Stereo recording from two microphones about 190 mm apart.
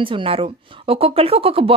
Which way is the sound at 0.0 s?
25° right (ahead or behind).